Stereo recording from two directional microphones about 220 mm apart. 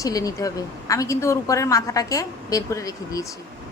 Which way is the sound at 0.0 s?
15° left (ahead or behind).